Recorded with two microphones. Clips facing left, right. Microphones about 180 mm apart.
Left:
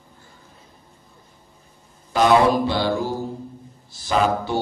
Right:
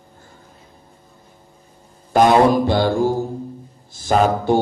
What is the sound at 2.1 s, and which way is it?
A man's voice, 50° right (ahead or behind).